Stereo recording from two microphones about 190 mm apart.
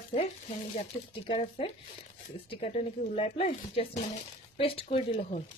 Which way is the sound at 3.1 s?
30° left (ahead or behind).